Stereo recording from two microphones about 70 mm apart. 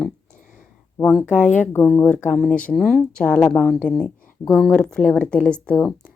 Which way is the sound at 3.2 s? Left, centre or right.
Centre.